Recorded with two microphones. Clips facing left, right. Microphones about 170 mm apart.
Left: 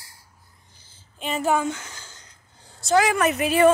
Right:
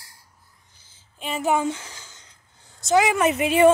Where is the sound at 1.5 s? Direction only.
30° right (ahead or behind).